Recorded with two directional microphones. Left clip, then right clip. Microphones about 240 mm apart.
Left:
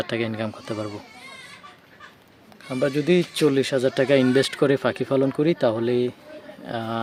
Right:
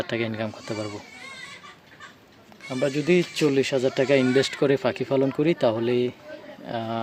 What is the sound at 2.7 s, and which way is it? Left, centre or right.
Speech, centre.